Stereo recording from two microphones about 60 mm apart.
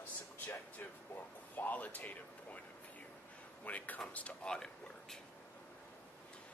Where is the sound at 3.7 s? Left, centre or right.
Left.